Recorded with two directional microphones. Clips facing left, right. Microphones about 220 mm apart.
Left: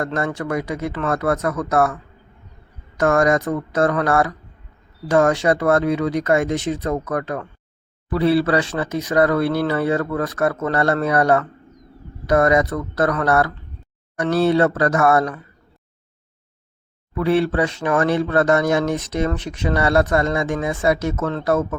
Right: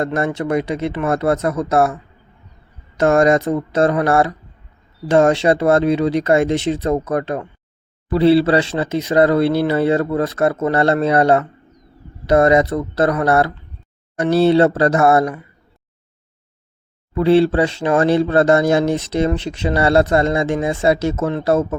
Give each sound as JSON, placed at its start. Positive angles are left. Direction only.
{"t": 0.0, "sound": "speech", "side_deg": -25}
{"t": 3.0, "sound": "speech", "side_deg": -25}
{"t": 17.2, "sound": "speech", "side_deg": -30}